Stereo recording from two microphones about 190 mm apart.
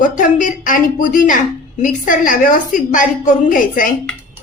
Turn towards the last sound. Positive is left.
turn(degrees=45)  # may be behind; listen again after turning